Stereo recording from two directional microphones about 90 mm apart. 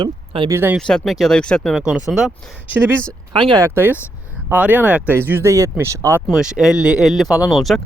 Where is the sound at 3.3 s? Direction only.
65° right (ahead or behind).